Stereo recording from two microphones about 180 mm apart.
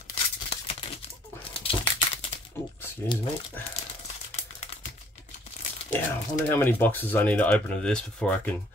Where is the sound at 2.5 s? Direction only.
10° left (ahead or behind).